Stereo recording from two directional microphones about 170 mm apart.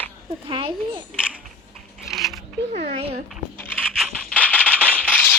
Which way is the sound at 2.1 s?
Centre (ahead or behind).